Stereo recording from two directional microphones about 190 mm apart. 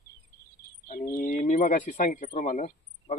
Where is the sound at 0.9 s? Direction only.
50° left (ahead or behind).